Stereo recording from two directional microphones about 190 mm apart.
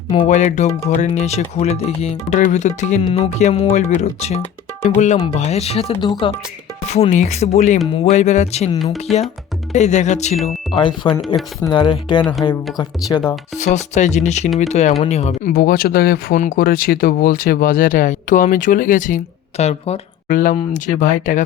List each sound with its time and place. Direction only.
0.1 s speech: 35° left (ahead or behind)
8.8 s speech: centre (ahead or behind)
9.7 s speech: 35° left (ahead or behind)
10.8 s speech: 25° left (ahead or behind)
12.2 s speech: centre (ahead or behind)
12.7 s speech: 20° left (ahead or behind)
13.6 s speech: 35° left (ahead or behind)
15.5 s speech: 50° left (ahead or behind); by 20.0 s 35° left (ahead or behind)
20.2 s speech: 45° left (ahead or behind)